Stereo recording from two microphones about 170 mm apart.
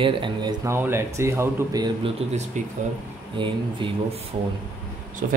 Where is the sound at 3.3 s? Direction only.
30° right (ahead or behind).